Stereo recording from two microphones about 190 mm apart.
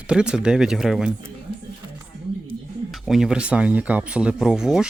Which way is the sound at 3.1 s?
5° right (ahead or behind).